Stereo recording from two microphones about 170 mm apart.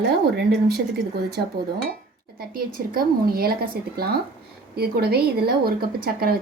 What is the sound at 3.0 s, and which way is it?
Speech, 60° right (ahead or behind).